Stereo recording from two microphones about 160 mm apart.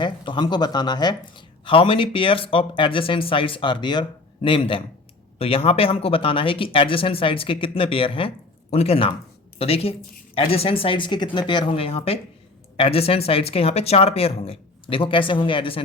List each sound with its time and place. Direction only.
0.0 s speech: 30° left (ahead or behind)